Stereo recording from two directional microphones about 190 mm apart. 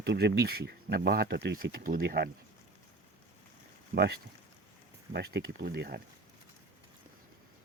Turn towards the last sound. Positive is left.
turn(degrees=-60)  # may be behind; listen again after turning